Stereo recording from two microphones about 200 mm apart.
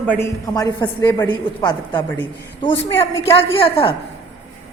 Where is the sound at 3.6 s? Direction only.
25° left (ahead or behind).